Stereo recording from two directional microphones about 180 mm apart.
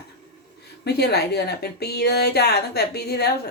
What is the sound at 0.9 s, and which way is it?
Speech, 65° left (ahead or behind).